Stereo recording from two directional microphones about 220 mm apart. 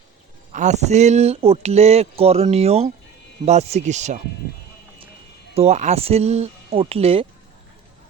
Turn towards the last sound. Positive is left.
turn(degrees=-25)  # may be behind; listen again after turning